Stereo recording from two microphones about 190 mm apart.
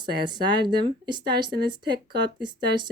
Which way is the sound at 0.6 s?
25° right (ahead or behind).